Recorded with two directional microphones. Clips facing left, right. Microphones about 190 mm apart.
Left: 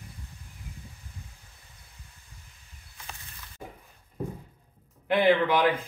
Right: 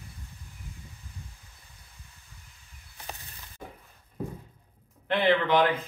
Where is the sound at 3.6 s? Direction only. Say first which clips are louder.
Left 1 dB; 15° left (ahead or behind).